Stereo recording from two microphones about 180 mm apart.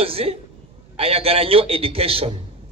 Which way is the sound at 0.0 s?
30° right (ahead or behind).